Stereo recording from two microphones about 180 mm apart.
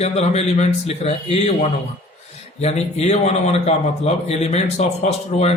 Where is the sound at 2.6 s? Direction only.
40° left (ahead or behind).